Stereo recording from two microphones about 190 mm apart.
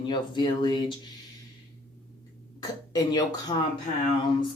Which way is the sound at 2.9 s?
20° left (ahead or behind).